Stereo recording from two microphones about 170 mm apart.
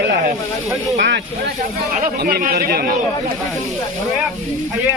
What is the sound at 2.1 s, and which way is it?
Speech, 60° right (ahead or behind).